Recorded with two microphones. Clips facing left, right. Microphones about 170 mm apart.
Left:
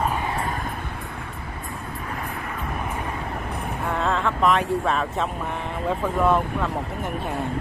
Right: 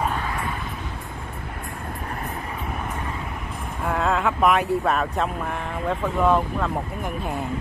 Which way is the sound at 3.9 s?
5° right (ahead or behind).